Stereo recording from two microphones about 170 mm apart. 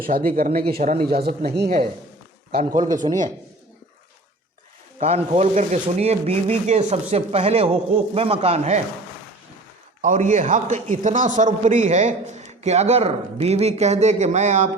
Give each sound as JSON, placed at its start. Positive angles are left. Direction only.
{"t": 0.0, "sound": "speech", "side_deg": -55}
{"t": 1.0, "sound": "a man's voice", "side_deg": -65}
{"t": 2.9, "sound": "a man's voice", "side_deg": -50}
{"t": 4.9, "sound": "speech", "side_deg": -40}
{"t": 10.0, "sound": "a man's voice", "side_deg": -50}